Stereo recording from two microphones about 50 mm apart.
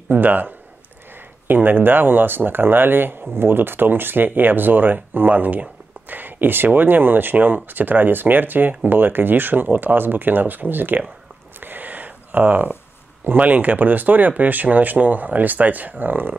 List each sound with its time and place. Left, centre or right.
0.1 s speech: right
11.6 s a sound: right
13.4 s speech: right